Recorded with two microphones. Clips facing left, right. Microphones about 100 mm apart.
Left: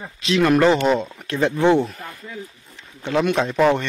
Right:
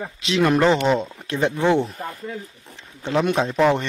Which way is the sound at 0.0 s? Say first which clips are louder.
Left 1 dB; 25° right (ahead or behind).